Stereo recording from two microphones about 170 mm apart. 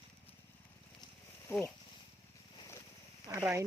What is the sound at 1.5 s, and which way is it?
Speech, 15° left (ahead or behind).